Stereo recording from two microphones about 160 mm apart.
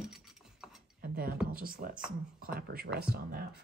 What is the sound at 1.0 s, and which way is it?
Speech, 65° right (ahead or behind).